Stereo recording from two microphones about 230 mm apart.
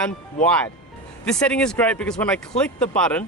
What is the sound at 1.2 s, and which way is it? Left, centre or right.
Speech, centre.